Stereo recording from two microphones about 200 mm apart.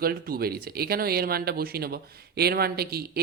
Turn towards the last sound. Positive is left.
turn(degrees=-50)  # may be behind; listen again after turning